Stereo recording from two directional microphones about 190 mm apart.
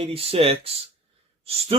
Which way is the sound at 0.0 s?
30° right (ahead or behind).